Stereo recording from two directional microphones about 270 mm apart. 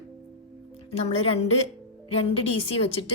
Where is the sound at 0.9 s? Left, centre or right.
Left.